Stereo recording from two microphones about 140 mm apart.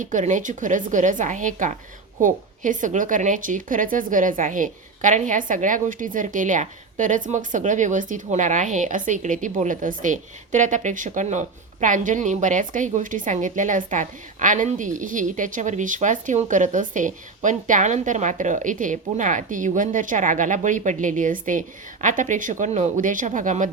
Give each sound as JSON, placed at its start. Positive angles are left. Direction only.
{"t": 0.0, "sound": "a woman's voice", "side_deg": -65}